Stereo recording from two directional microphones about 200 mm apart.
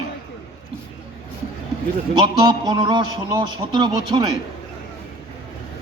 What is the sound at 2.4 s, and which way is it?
A man's voice, 20° right (ahead or behind).